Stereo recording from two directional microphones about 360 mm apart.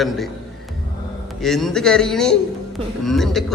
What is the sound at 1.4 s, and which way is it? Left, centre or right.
Speech, centre.